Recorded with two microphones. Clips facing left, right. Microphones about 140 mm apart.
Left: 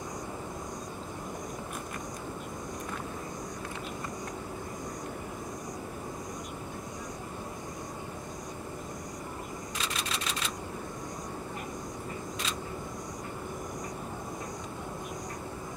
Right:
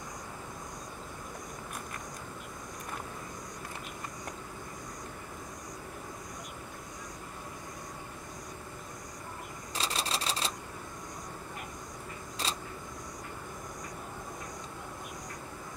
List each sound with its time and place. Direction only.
9.8 s typewriter: 30° right (ahead or behind)